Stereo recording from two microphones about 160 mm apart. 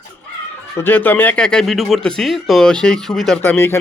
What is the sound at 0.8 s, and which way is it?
Speech, 10° left (ahead or behind).